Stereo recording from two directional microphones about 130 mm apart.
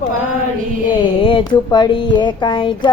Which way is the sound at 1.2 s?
40° left (ahead or behind).